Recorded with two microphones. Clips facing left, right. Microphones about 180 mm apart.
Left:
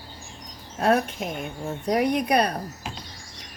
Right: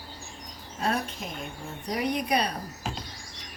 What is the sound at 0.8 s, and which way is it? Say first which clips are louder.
Speech: left 8 dB; 55° left (ahead or behind).